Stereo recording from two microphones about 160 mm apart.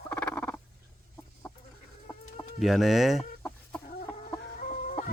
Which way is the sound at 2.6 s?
Centre (ahead or behind).